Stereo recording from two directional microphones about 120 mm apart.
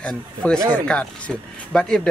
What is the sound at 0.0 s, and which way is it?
Speech, 5° left (ahead or behind).